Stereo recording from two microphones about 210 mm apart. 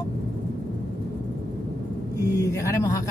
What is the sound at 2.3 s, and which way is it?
Speech, 15° left (ahead or behind).